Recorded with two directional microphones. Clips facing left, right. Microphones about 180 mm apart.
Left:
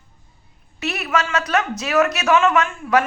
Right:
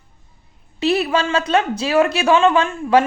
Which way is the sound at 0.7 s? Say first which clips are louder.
Right 5 dB; 30° right (ahead or behind).